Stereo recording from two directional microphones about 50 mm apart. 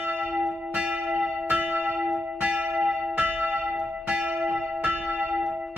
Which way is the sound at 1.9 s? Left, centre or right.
Centre.